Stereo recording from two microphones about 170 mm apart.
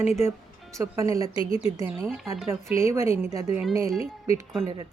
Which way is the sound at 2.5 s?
15° right (ahead or behind).